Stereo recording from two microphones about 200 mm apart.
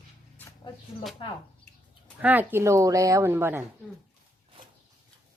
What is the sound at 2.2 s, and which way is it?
Speech, 10° right (ahead or behind).